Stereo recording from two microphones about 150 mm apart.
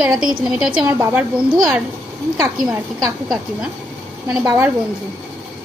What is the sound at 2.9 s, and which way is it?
Speech, 25° right (ahead or behind).